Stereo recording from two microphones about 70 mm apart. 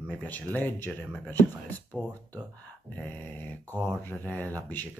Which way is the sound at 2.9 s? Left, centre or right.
Left.